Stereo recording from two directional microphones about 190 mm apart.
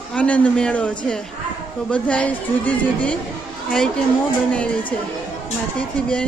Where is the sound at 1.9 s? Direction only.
5° left (ahead or behind).